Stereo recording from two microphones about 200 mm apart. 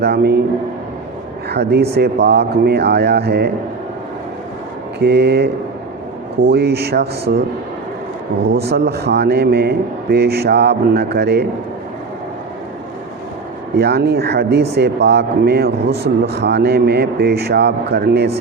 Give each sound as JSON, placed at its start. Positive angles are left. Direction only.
{"t": 0.0, "sound": "speech", "side_deg": -55}
{"t": 1.5, "sound": "speech", "side_deg": -55}
{"t": 4.9, "sound": "speech", "side_deg": -55}
{"t": 8.7, "sound": "speech", "side_deg": -55}
{"t": 13.7, "sound": "speech", "side_deg": -55}